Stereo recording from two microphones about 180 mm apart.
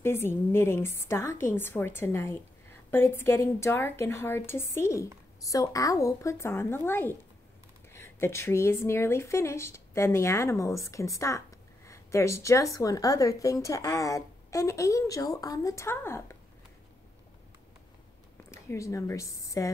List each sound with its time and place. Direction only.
0.0 s speech: 15° left (ahead or behind)
18.5 s speech: 15° left (ahead or behind)